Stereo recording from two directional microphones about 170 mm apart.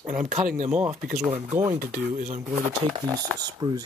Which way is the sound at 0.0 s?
50° right (ahead or behind).